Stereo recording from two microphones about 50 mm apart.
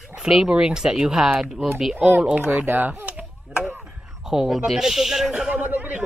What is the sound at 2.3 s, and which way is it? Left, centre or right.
Speech, right.